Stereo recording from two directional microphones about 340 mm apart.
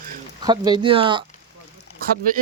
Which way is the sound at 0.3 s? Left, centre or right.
Centre.